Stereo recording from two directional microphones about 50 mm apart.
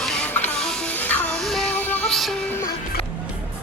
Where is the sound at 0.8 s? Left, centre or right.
Left.